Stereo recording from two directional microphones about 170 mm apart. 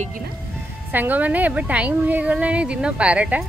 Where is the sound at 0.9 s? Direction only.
10° right (ahead or behind).